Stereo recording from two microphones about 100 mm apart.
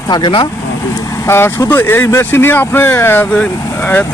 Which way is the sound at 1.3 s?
25° left (ahead or behind).